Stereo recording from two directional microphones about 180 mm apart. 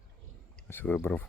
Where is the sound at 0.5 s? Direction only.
10° left (ahead or behind).